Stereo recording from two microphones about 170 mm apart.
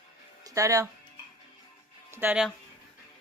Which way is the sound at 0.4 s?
20° right (ahead or behind).